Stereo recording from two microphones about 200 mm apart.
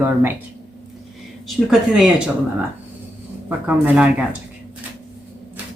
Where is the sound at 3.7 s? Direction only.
5° right (ahead or behind).